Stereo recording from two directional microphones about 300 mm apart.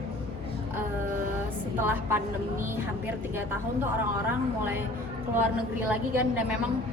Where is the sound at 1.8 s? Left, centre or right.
Centre.